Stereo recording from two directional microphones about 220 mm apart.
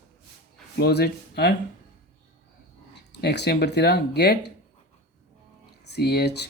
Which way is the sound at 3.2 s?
50° left (ahead or behind).